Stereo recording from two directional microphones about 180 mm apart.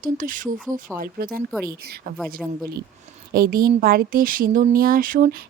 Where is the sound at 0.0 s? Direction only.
50° right (ahead or behind).